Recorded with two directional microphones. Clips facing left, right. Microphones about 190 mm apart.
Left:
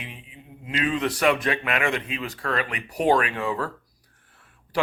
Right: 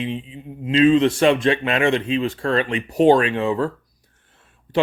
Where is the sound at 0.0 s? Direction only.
25° right (ahead or behind).